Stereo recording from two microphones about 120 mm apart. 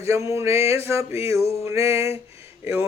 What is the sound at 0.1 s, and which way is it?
Speech, 25° right (ahead or behind).